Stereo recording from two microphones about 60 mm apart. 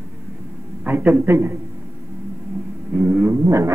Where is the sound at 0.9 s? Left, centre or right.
Right.